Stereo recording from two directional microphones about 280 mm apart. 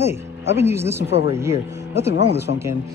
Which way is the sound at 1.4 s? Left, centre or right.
Centre.